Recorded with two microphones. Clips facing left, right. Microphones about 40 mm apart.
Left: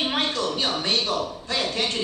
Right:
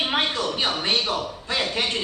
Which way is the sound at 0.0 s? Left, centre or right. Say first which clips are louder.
Right 1 dB; centre.